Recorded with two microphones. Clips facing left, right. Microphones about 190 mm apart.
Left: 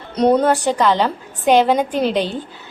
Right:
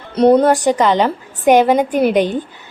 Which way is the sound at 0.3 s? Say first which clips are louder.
Right 4 dB; 15° right (ahead or behind).